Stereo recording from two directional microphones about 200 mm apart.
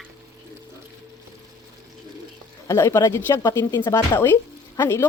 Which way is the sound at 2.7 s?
15° left (ahead or behind).